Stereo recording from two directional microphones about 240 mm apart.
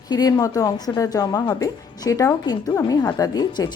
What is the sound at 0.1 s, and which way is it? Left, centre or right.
Speech, centre.